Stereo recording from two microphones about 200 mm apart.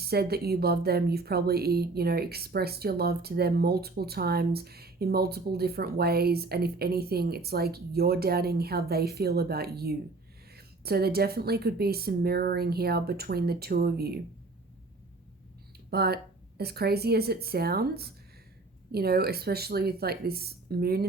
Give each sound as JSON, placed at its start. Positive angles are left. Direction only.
{"t": 0.1, "sound": "speech", "side_deg": -50}
{"t": 15.9, "sound": "speech", "side_deg": -50}